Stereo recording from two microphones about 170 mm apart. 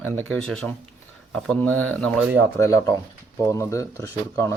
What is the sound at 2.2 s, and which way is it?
Speech, 10° right (ahead or behind).